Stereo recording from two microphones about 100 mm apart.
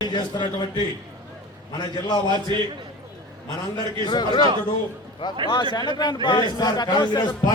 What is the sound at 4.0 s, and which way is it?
Speech, 50° left (ahead or behind).